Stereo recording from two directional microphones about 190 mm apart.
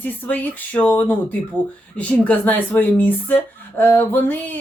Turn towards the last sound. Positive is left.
turn(degrees=10)  # may be behind; listen again after turning